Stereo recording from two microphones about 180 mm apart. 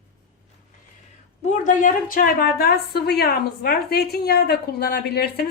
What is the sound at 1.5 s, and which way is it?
A woman's voice, 45° left (ahead or behind).